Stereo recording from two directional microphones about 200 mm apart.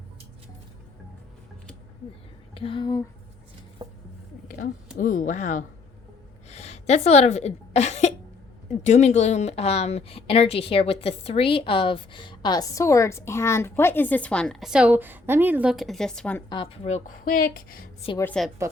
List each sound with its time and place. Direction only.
2.6 s speech: 25° left (ahead or behind)
3.8 s a sound: 20° right (ahead or behind)
4.4 s a sound: 40° left (ahead or behind)
4.9 s a woman's voice: 40° left (ahead or behind); by 16.4 s 5° left (ahead or behind)
16.5 s speech: 25° left (ahead or behind); by 17.8 s 45° left (ahead or behind)
18.2 s a woman's voice: 5° left (ahead or behind)